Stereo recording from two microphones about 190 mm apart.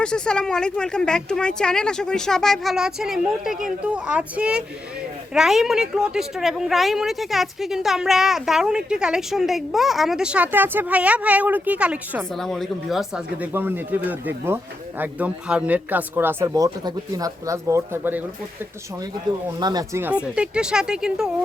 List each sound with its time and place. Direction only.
0.0 s speech: 5° left (ahead or behind); by 18.2 s 10° right (ahead or behind)
19.5 s speech: 20° right (ahead or behind); by 21.2 s 5° right (ahead or behind)